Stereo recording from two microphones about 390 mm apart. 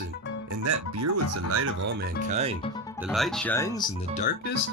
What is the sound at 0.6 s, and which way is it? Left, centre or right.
Speech, right.